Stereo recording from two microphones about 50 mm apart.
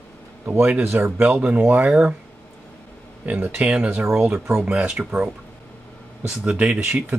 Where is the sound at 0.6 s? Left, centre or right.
Right.